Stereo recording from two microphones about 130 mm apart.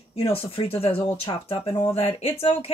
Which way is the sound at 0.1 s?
45° left (ahead or behind).